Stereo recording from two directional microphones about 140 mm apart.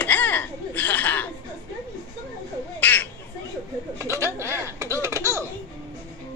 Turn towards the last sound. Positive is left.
turn(degrees=-20)  # may be behind; listen again after turning